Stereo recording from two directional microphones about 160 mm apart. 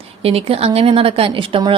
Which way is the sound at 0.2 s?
35° right (ahead or behind).